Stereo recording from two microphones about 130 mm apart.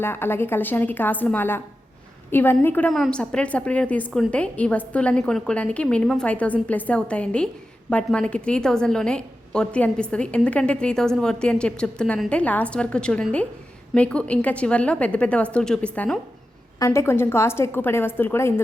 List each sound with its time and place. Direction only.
0.0 s a woman's voice: 15° left (ahead or behind)
2.9 s a woman's voice: 5° left (ahead or behind)
16.8 s a woman's voice: 20° left (ahead or behind)